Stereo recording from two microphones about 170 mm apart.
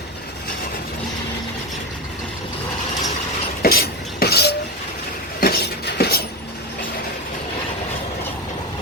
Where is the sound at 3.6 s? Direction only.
65° left (ahead or behind).